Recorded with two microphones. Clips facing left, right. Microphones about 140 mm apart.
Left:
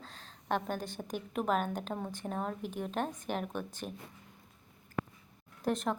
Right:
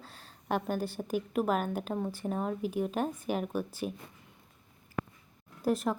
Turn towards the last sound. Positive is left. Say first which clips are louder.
# right 3 dB
turn(degrees=-5)  # may be behind; listen again after turning